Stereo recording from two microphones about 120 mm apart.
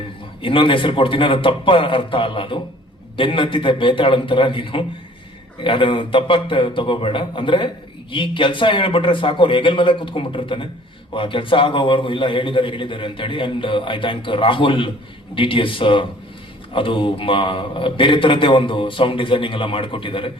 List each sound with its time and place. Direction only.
0.4 s a man's voice: 45° left (ahead or behind)